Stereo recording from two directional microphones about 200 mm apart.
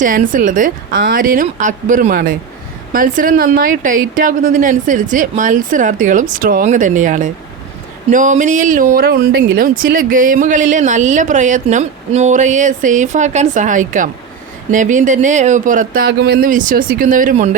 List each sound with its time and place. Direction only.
0.0 s a woman's voice: 40° right (ahead or behind)